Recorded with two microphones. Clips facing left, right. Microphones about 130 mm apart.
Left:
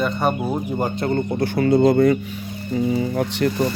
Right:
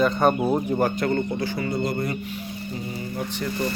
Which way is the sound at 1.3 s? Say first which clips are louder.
Left 8 dB; 60° left (ahead or behind).